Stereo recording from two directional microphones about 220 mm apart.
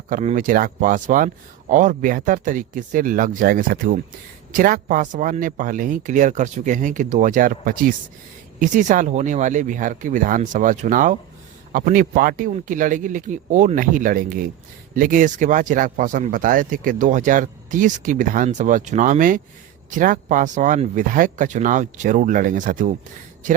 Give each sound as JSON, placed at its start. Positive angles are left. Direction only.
{"t": 0.1, "sound": "speech", "side_deg": -35}